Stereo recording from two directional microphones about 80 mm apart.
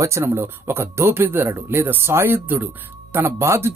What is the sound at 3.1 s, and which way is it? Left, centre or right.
Speech, right.